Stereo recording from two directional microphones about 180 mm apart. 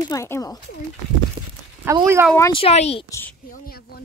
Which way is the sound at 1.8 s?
15° right (ahead or behind).